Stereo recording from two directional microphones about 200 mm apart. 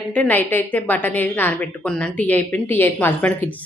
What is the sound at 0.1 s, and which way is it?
A woman's voice, 10° left (ahead or behind).